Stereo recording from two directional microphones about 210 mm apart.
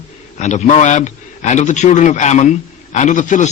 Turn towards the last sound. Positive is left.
turn(degrees=35)  # may be behind; listen again after turning